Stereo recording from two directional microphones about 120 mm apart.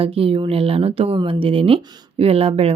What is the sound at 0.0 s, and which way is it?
Speech, 50° right (ahead or behind).